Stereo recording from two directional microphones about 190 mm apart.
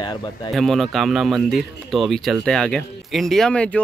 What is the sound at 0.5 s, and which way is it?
Speech, centre (ahead or behind).